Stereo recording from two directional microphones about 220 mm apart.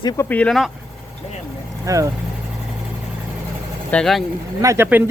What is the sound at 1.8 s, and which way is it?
Speech, 15° right (ahead or behind).